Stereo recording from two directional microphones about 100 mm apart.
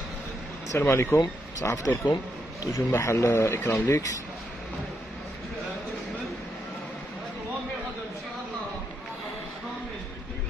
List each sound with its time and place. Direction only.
0.7 s speech: 25° left (ahead or behind)